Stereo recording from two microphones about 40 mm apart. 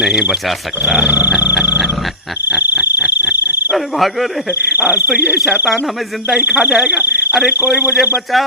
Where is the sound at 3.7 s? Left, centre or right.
Centre.